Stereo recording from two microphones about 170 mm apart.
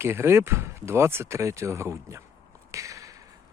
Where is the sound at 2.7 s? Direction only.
20° right (ahead or behind).